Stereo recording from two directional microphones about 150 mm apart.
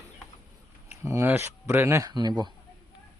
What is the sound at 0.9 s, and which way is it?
Speech, 15° right (ahead or behind).